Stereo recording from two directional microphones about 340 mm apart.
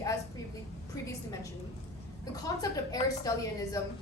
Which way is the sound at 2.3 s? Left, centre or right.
Centre.